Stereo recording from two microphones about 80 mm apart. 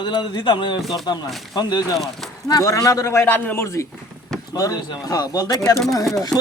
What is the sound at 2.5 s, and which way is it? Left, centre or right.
Speech, left.